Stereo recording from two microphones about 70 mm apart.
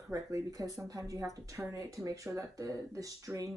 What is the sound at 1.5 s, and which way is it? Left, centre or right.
Speech, right.